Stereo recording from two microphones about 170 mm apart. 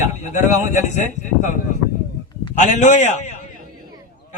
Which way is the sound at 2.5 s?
45° left (ahead or behind).